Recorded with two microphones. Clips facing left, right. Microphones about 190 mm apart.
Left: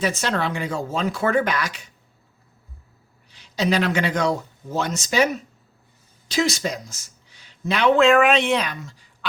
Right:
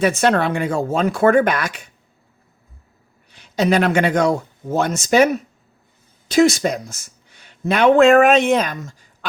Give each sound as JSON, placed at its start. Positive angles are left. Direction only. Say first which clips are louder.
{"t": 0.0, "sound": "speech", "louder": "right 7 dB", "side_deg": -55}
{"t": 3.3, "sound": "speech", "louder": "right 5 dB", "side_deg": -55}